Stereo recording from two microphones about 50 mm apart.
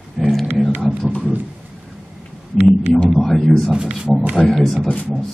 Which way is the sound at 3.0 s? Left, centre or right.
Centre.